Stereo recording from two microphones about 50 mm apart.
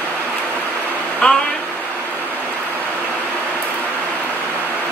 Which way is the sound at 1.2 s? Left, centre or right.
Centre.